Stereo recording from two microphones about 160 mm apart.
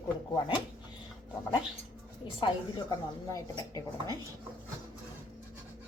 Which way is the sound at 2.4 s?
20° left (ahead or behind).